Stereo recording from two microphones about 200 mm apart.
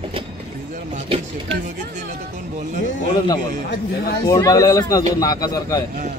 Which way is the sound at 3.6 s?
55° left (ahead or behind).